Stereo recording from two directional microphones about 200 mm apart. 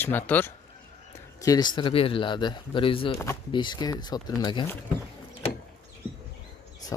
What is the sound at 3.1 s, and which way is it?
Speech, 15° left (ahead or behind).